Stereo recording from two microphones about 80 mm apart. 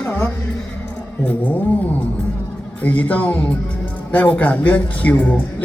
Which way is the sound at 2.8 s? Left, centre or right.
Left.